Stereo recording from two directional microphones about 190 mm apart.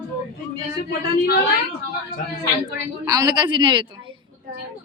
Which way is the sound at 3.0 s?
20° right (ahead or behind).